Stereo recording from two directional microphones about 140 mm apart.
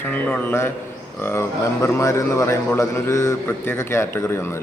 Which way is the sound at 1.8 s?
20° left (ahead or behind).